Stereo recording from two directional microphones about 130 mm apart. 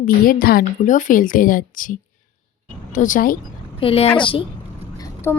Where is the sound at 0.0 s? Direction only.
90° left.